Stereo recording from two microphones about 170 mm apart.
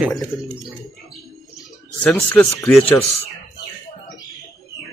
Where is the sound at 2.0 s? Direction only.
5° left (ahead or behind).